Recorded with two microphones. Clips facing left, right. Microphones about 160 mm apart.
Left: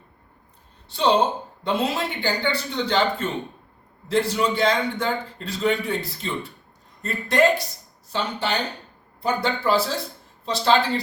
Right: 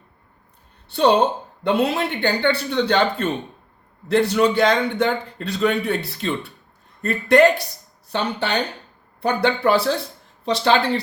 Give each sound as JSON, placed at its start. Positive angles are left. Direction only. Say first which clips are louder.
{"t": 0.9, "sound": "a woman's voice", "louder": "right 3 dB", "side_deg": -60}